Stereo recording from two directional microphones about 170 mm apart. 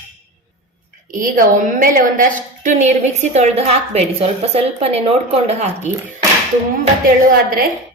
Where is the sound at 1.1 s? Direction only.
55° right (ahead or behind).